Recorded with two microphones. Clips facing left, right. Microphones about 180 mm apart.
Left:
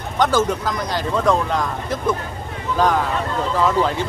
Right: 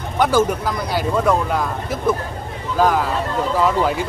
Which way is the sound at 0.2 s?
10° right (ahead or behind).